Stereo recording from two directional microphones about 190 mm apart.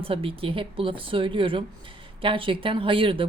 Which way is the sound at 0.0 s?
30° right (ahead or behind).